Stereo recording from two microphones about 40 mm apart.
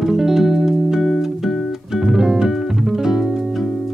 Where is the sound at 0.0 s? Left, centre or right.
Centre.